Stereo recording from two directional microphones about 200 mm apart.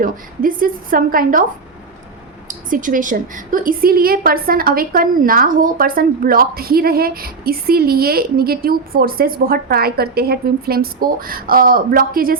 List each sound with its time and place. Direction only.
0.0 s a woman's voice: 45° right (ahead or behind)
2.5 s a woman's voice: 40° right (ahead or behind)